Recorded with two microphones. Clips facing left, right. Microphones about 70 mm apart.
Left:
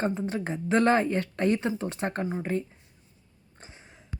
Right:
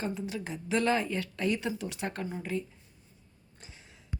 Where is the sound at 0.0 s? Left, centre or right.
Left.